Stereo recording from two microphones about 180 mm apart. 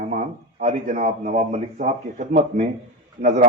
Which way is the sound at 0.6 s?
40° right (ahead or behind).